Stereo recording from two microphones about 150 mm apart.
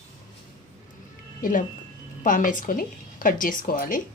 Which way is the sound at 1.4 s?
65° left (ahead or behind).